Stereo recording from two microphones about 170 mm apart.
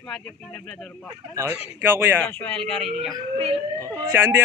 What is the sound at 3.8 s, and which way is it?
Speech, 15° right (ahead or behind).